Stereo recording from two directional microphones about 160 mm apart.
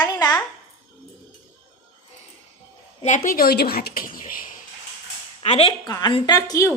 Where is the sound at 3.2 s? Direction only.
70° left (ahead or behind).